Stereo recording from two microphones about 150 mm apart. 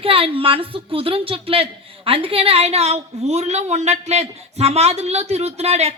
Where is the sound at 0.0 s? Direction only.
40° right (ahead or behind).